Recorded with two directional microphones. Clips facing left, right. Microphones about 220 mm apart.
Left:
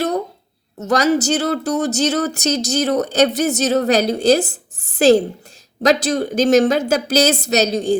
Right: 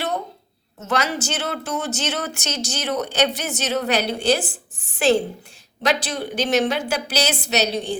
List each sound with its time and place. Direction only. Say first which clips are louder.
0.8 s a woman's voice: left 8 dB; 40° left (ahead or behind)